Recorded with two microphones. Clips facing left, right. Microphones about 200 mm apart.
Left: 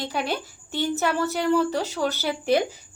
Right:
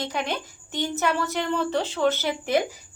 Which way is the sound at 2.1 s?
20° right (ahead or behind).